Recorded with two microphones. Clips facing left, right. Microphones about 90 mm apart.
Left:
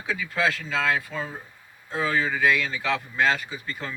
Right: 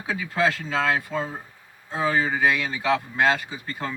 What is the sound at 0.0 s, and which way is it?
Speech, 15° right (ahead or behind).